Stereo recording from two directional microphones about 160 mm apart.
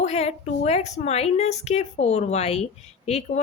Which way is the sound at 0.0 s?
40° left (ahead or behind).